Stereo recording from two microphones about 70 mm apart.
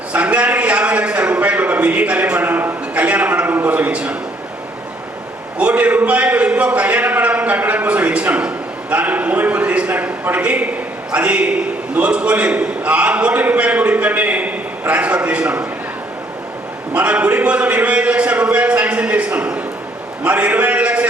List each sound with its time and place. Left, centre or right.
0.1 s a sound: centre
2.9 s a man's voice: centre
5.5 s a man's voice: centre
16.9 s a man's voice: centre